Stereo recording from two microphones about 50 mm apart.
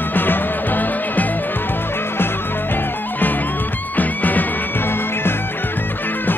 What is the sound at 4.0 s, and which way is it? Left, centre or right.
Music, left.